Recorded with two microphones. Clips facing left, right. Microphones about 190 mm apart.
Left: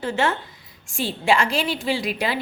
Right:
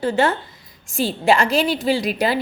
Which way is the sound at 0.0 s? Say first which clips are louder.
Right 4 dB; 35° right (ahead or behind).